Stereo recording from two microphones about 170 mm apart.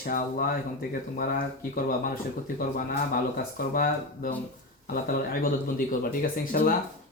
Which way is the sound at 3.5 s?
60° left (ahead or behind).